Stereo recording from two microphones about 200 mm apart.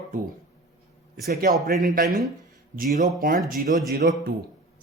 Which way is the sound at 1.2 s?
50° right (ahead or behind).